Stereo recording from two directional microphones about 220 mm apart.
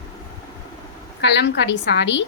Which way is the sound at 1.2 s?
55° left (ahead or behind).